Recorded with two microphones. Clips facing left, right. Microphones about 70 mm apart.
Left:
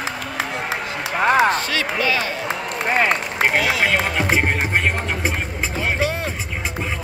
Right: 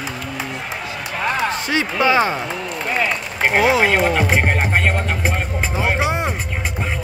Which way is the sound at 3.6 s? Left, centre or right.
Right.